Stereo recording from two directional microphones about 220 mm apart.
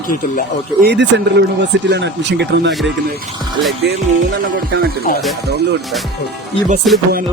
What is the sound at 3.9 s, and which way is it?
Speech, 50° right (ahead or behind).